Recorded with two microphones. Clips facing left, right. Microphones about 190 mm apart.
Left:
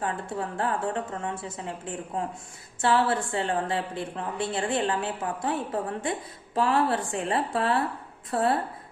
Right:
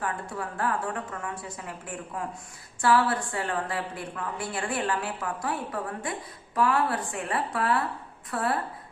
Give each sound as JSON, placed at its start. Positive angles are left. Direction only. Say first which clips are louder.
{"t": 0.0, "sound": "a woman's voice", "louder": "left 2 dB", "side_deg": 25}